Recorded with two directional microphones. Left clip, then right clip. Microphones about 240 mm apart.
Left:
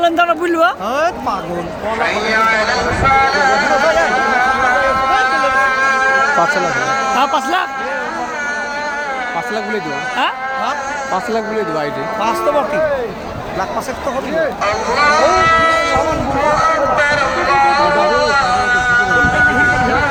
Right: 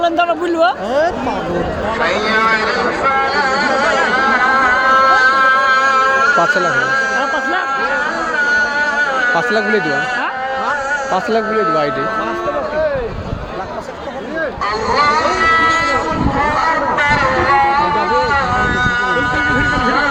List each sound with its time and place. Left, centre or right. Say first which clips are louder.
0.0 s speech: left 1 dB; left
3.6 s music: left 1 dB; centre
5.7 s music: right 1 dB; centre; by 7.0 s right
14.9 s speech: left 2 dB; left
18.8 s a sound: left 2 dB; centre